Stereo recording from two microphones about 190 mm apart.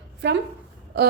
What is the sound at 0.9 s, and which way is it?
Throat clearing, 60° right (ahead or behind).